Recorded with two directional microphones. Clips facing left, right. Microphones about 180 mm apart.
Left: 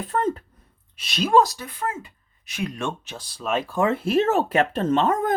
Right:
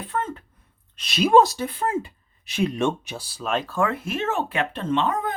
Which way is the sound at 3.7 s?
20° left (ahead or behind).